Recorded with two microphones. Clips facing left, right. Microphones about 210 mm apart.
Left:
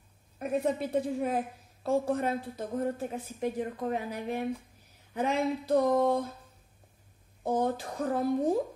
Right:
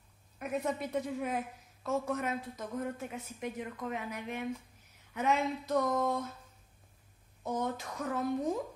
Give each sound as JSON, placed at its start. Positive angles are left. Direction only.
{"t": 0.4, "sound": "a woman's voice", "side_deg": 30}
{"t": 7.4, "sound": "a woman's voice", "side_deg": 30}